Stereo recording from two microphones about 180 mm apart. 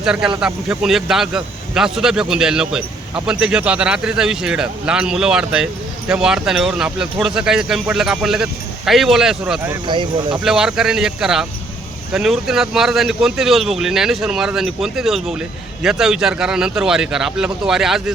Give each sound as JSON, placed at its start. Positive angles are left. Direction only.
{"t": 0.0, "sound": "speech", "side_deg": -5}
{"t": 9.8, "sound": "speech", "side_deg": -25}
{"t": 10.4, "sound": "speech", "side_deg": -5}